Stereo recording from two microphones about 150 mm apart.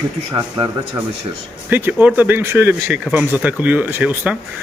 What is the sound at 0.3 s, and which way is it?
Speech, 30° right (ahead or behind).